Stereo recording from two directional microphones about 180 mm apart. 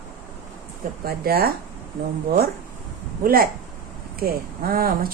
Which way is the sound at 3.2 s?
55° right (ahead or behind).